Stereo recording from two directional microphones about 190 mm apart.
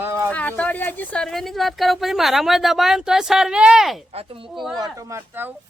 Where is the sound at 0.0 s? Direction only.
15° right (ahead or behind).